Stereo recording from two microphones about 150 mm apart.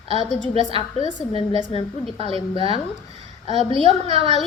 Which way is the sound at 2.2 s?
40° right (ahead or behind).